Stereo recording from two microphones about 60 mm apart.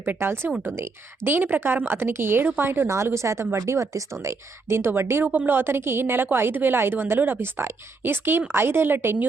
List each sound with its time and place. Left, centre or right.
0.0 s a woman's voice: right
5.3 s a woman's voice: right